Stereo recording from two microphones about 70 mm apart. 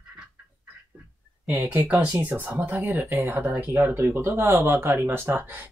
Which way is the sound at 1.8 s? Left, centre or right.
Centre.